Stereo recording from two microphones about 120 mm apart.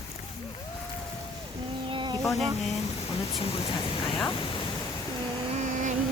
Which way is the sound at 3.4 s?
45° left (ahead or behind).